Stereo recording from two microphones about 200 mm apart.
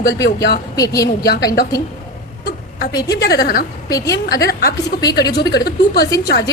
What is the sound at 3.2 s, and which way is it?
Speech, 50° left (ahead or behind).